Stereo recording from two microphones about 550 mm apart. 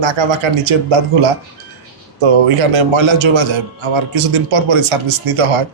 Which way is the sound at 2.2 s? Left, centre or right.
Right.